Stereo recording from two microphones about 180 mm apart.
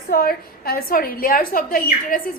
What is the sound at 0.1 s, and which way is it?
A woman's voice, 55° left (ahead or behind).